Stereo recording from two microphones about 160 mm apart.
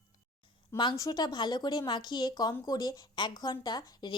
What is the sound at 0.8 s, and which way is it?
A woman's voice, 25° left (ahead or behind).